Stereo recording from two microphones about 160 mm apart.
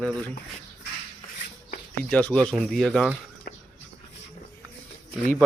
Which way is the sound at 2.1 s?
10° left (ahead or behind).